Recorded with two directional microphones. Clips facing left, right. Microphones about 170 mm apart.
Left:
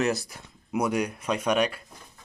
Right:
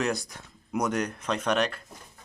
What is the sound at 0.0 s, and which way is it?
Speech, 5° left (ahead or behind).